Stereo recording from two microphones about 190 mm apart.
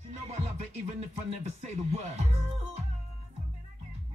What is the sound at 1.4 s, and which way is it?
Speech, 35° right (ahead or behind).